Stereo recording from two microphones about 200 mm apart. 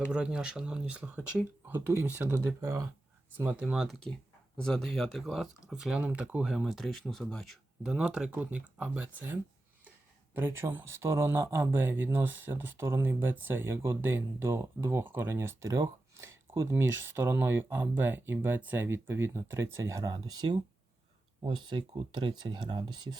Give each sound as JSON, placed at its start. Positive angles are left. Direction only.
{"t": 0.1, "sound": "speech", "side_deg": -5}
{"t": 21.4, "sound": "speech", "side_deg": -25}